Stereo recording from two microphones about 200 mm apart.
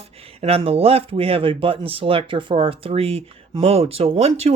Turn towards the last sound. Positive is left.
turn(degrees=-30)  # may be behind; listen again after turning